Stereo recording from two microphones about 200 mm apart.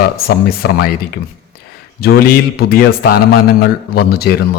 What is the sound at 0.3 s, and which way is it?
Speech, 50° left (ahead or behind).